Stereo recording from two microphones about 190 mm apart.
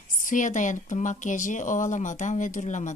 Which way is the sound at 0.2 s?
45° left (ahead or behind).